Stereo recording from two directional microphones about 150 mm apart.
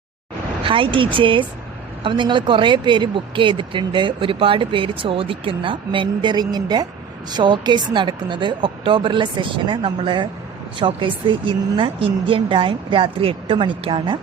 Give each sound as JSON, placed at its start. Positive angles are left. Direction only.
{"t": 0.6, "sound": "a woman's voice", "side_deg": -35}